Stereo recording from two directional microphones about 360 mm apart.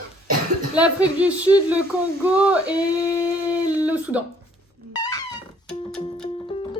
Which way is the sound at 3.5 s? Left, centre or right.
Centre.